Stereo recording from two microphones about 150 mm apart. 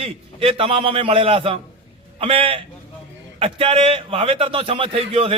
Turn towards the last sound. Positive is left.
turn(degrees=-35)  # may be behind; listen again after turning